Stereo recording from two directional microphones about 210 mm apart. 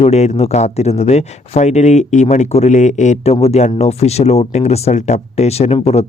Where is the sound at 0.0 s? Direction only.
30° left (ahead or behind).